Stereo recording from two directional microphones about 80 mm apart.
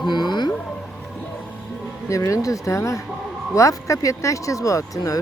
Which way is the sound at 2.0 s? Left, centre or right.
Left.